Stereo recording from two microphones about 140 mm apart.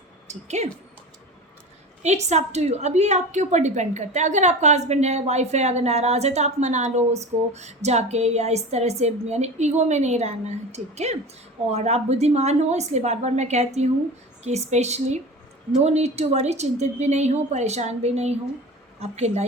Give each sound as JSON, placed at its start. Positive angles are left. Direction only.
{"t": 0.3, "sound": "a woman's voice", "side_deg": -55}
{"t": 2.0, "sound": "a woman's voice", "side_deg": -55}